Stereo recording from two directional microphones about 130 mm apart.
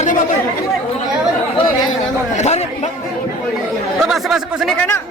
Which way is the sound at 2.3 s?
60° left (ahead or behind).